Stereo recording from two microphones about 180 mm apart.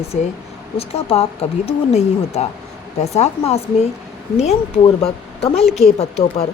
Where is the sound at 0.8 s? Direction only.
35° left (ahead or behind).